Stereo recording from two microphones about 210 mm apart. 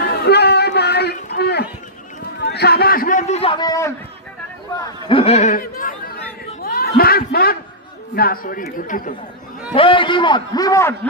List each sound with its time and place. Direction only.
0.0 s a sound: 50° left (ahead or behind)
8.1 s a man's voice: 45° left (ahead or behind)
9.7 s a man's voice: 25° left (ahead or behind)